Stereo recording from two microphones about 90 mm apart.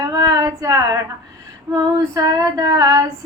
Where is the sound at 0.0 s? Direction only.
45° right (ahead or behind).